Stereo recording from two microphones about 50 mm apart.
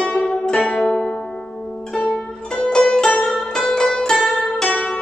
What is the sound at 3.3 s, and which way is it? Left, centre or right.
Zither, centre.